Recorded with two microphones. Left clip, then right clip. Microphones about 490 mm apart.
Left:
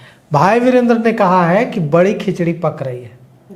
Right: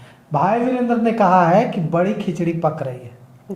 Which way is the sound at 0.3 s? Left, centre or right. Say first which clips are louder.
Left 6 dB; left.